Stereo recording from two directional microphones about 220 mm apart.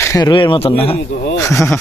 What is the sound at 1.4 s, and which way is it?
Speech, 10° left (ahead or behind).